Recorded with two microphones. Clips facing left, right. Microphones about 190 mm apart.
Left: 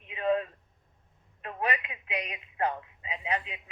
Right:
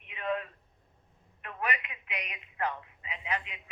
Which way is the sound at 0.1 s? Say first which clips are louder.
Left 6 dB; 30° left (ahead or behind).